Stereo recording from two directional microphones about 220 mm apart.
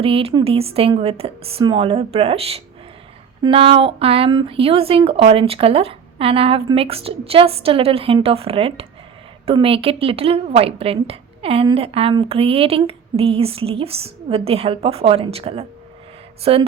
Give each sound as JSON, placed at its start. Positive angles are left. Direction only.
{"t": 0.0, "sound": "a woman's voice", "side_deg": -25}